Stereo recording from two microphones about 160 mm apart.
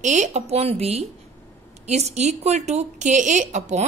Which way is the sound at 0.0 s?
50° right (ahead or behind).